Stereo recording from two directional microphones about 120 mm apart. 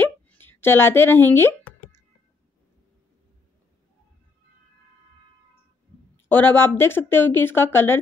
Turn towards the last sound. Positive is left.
turn(degrees=20)  # may be behind; listen again after turning